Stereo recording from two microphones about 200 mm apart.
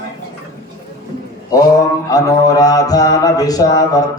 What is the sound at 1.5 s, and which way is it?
Mantra, 15° left (ahead or behind).